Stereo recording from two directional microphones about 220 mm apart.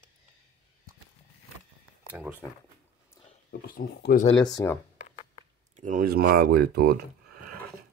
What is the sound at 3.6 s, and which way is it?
Speech, 45° left (ahead or behind).